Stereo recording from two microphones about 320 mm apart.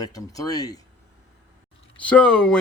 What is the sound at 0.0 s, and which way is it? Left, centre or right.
Speech, centre.